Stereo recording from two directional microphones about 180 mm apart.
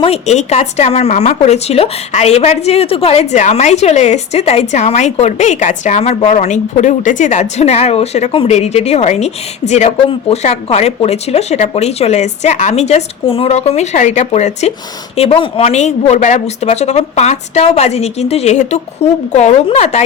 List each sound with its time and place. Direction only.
0.0 s a woman's voice: 35° left (ahead or behind)